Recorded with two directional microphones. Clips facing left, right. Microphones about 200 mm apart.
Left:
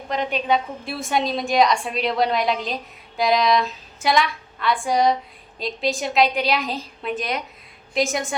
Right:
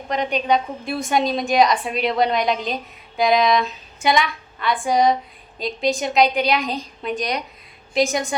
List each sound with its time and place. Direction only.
0.1 s a woman's voice: centre (ahead or behind)